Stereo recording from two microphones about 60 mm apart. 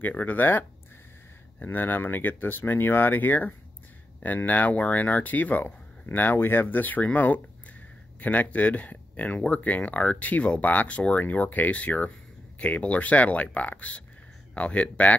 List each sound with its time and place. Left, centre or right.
0.0 s speech: left